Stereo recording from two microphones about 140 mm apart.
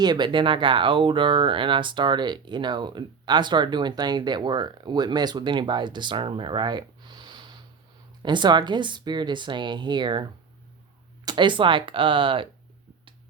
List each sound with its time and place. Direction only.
0.0 s speech: 30° right (ahead or behind)
11.3 s speech: 35° right (ahead or behind)